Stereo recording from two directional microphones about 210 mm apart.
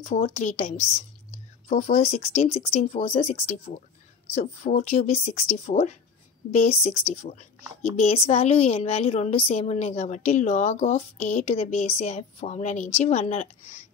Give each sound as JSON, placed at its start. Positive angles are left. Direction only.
{"t": 0.2, "sound": "a woman's voice", "side_deg": 35}